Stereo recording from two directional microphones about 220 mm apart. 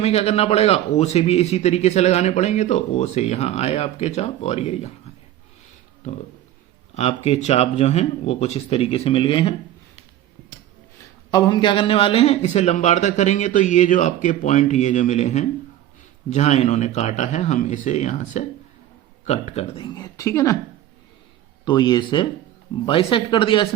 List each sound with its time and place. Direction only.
0.0 s a man's voice: 30° left (ahead or behind)
11.3 s a man's voice: 20° left (ahead or behind)
21.6 s a man's voice: 20° left (ahead or behind)